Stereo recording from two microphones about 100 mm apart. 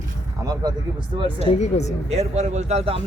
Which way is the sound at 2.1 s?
90° right.